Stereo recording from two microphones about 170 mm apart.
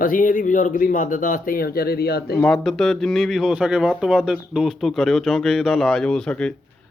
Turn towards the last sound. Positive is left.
turn(degrees=5)  # may be behind; listen again after turning